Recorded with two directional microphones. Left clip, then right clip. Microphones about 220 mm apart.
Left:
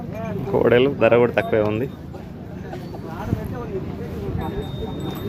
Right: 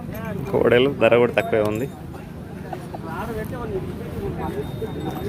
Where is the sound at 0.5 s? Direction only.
Centre (ahead or behind).